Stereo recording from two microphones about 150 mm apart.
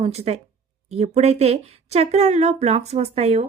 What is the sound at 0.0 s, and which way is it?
A woman's voice, 45° right (ahead or behind).